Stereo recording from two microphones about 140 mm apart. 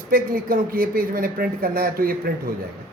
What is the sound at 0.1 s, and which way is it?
A man's voice, 90° right.